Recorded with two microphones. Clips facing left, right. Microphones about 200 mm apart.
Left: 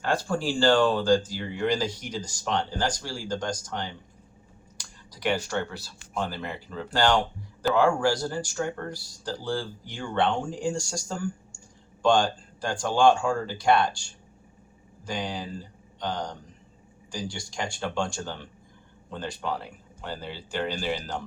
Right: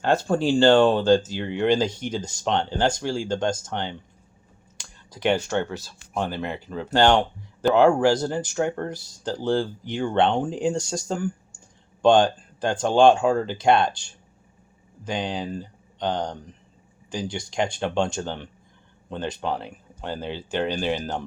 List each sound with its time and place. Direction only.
0.0 s speech: 25° right (ahead or behind)